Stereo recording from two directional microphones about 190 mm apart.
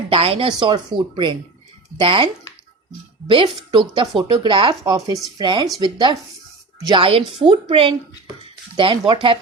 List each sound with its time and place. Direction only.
0.1 s speech: 30° right (ahead or behind)